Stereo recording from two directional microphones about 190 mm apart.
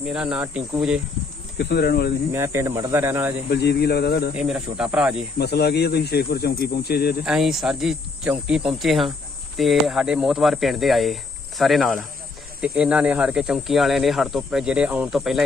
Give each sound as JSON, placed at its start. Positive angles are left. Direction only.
{"t": 0.0, "sound": "speech", "side_deg": -5}
{"t": 1.5, "sound": "speech", "side_deg": 55}
{"t": 2.3, "sound": "speech", "side_deg": -15}
{"t": 3.5, "sound": "speech", "side_deg": 60}
{"t": 4.4, "sound": "speech", "side_deg": -5}
{"t": 5.4, "sound": "speech", "side_deg": 60}
{"t": 7.3, "sound": "speech", "side_deg": 0}